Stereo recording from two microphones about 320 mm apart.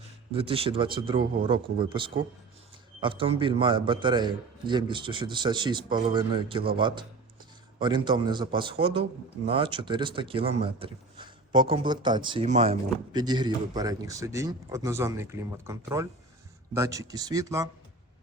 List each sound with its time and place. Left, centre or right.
0.3 s speech: centre